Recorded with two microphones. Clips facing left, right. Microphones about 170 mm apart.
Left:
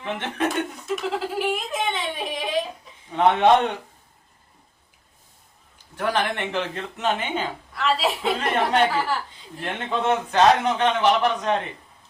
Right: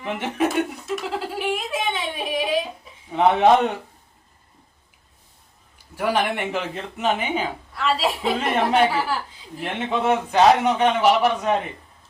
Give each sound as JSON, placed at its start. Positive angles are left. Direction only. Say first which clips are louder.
{"t": 0.0, "sound": "speech", "louder": "right 3 dB", "side_deg": -10}
{"t": 6.0, "sound": "speech", "louder": "right 2 dB", "side_deg": -10}